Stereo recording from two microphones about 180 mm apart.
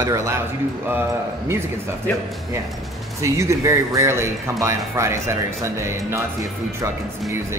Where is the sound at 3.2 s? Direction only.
15° right (ahead or behind).